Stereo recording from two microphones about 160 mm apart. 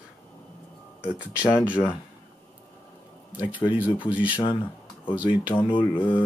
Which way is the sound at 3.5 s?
10° right (ahead or behind).